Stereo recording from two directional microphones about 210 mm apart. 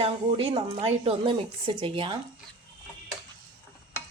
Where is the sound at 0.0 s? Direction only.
25° right (ahead or behind).